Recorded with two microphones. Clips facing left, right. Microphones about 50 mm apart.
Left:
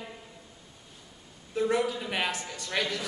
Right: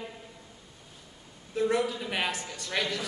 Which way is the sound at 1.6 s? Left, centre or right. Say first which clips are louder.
Even; centre.